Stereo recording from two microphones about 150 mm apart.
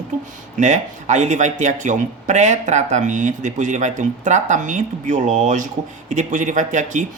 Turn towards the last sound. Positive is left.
turn(degrees=-55)  # may be behind; listen again after turning